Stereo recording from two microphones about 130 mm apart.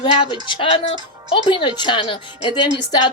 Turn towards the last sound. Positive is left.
turn(degrees=35)  # may be behind; listen again after turning